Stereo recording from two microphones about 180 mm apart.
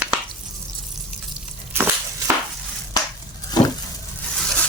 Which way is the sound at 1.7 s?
15° right (ahead or behind).